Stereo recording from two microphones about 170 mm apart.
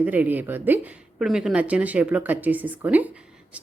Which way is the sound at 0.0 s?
10° right (ahead or behind).